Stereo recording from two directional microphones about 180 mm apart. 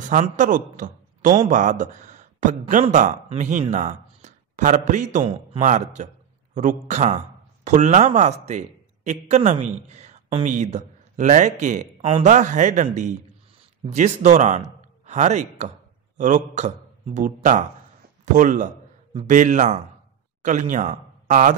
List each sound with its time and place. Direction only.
0.0 s a man's voice: 45° right (ahead or behind)